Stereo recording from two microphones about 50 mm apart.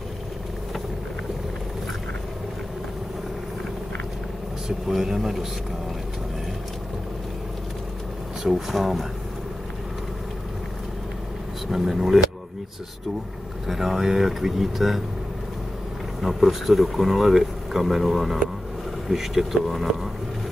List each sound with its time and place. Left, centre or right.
4.6 s speech: centre
8.5 s speech: centre
11.6 s speech: centre
13.7 s speech: centre
16.2 s speech: centre